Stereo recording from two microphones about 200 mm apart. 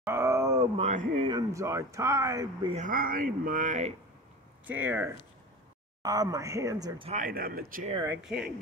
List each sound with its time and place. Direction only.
0.0 s groan: 15° right (ahead or behind)
0.7 s speech: 35° right (ahead or behind)
1.2 s speech: 20° right (ahead or behind)
2.7 s speech: 40° right (ahead or behind)
4.6 s speech: 10° right (ahead or behind)
7.1 s speech: 45° right (ahead or behind)
8.1 s speech: 5° right (ahead or behind)